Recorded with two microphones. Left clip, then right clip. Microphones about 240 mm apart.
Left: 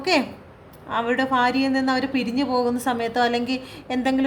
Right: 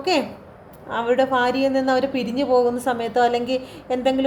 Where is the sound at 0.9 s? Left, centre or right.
Left.